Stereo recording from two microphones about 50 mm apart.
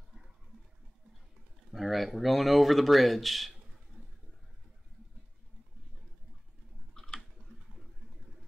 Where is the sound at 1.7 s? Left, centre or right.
Centre.